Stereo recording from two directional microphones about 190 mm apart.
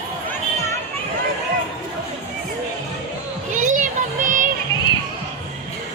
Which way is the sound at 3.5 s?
40° right (ahead or behind).